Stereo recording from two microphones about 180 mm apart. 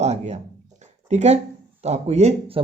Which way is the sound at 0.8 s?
40° right (ahead or behind).